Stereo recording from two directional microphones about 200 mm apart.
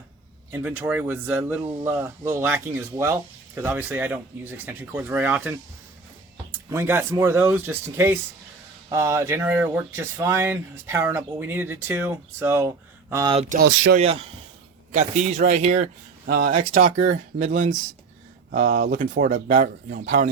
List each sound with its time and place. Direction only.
0.5 s speech: 10° right (ahead or behind)
6.7 s speech: 10° right (ahead or behind)
13.3 s speech: 30° right (ahead or behind)
16.2 s a man's voice: 50° right (ahead or behind)